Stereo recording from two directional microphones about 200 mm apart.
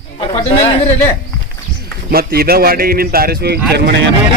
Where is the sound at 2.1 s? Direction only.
50° right (ahead or behind).